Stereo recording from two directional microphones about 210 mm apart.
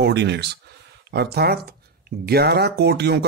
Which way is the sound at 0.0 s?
55° right (ahead or behind).